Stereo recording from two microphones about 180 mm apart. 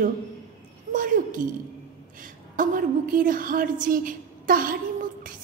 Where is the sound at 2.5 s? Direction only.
50° right (ahead or behind).